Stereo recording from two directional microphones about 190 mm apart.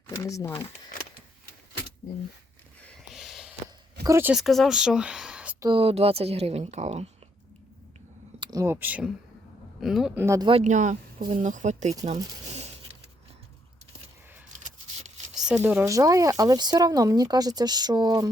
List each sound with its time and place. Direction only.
0.2 s speech: 15° left (ahead or behind)
2.8 s a sound: centre (ahead or behind)
4.0 s speech: 10° right (ahead or behind)
5.5 s a woman's voice: 25° right (ahead or behind)
8.4 s speech: 20° right (ahead or behind); by 10.2 s centre (ahead or behind)
10.2 s speech: 20° right (ahead or behind)
10.5 s a woman's voice: 40° right (ahead or behind)
15.4 s speech: 5° right (ahead or behind); by 18.3 s 20° right (ahead or behind)